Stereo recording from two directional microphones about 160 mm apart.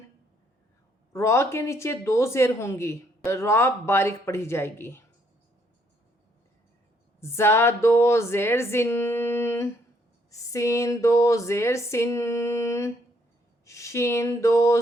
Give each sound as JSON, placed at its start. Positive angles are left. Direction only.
{"t": 1.1, "sound": "speech", "side_deg": 20}
{"t": 7.2, "sound": "speech", "side_deg": 15}
{"t": 10.2, "sound": "a sound", "side_deg": 20}